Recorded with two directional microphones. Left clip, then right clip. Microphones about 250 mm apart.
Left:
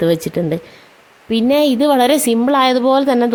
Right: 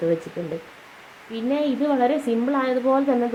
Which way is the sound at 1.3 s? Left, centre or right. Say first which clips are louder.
Left 10 dB; left.